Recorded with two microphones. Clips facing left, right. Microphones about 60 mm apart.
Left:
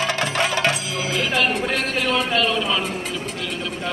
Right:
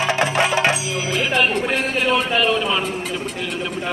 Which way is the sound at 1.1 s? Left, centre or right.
Centre.